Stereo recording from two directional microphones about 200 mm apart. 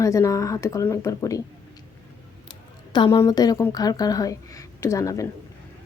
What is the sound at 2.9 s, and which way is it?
Speech, 20° left (ahead or behind).